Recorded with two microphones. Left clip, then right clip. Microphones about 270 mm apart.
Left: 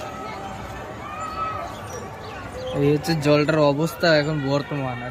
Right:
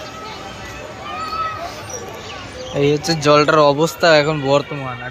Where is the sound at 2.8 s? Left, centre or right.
Centre.